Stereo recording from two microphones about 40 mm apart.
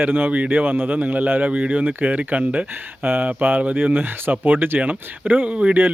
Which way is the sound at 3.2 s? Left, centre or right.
Right.